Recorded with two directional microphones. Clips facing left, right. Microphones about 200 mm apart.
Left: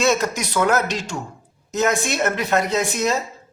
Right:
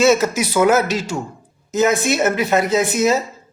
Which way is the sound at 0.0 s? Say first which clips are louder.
Right 5 dB; 5° right (ahead or behind).